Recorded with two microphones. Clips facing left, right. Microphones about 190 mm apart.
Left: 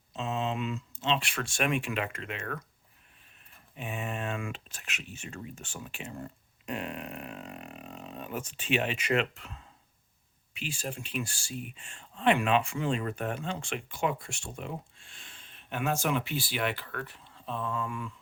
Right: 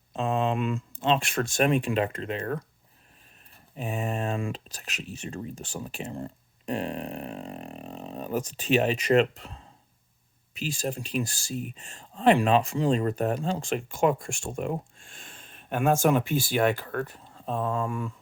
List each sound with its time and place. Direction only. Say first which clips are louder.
0.1 s speech: right 6 dB; 55° right (ahead or behind); by 2.6 s 35° right (ahead or behind)
3.8 s speech: right 5 dB; 35° right (ahead or behind)